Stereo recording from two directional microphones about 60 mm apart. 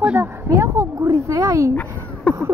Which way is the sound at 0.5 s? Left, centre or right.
Right.